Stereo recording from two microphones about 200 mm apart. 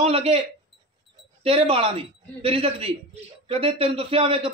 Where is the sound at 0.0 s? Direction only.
30° right (ahead or behind).